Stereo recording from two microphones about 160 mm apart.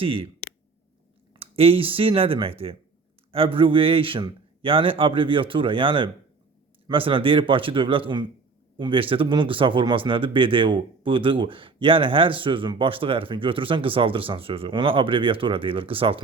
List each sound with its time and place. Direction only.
0.0 s speech: 35° right (ahead or behind)
1.4 s speech: 35° right (ahead or behind)